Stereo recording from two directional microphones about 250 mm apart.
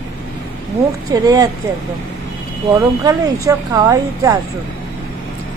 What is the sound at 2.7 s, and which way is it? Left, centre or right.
Speech, centre.